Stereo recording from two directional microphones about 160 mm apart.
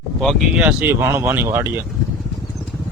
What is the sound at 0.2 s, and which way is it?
Speech, centre (ahead or behind).